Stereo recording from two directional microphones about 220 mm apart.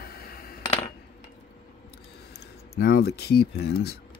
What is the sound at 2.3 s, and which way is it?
Speech, 45° left (ahead or behind).